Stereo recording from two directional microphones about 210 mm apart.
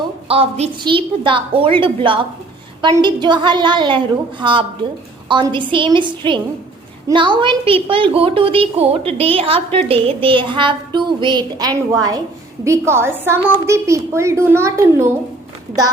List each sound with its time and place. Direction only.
0.3 s a woman's voice: 30° right (ahead or behind); by 15.1 s 10° right (ahead or behind)